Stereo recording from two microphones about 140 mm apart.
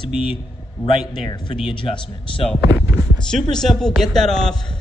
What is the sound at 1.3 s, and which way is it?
A man's voice, 35° left (ahead or behind).